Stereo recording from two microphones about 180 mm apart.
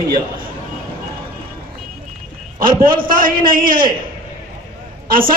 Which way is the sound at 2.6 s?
55° right (ahead or behind).